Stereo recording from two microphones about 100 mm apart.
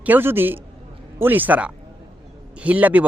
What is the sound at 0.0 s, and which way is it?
Speech, 20° right (ahead or behind).